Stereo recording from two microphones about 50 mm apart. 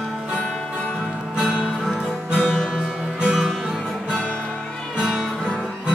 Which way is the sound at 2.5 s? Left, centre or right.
Centre.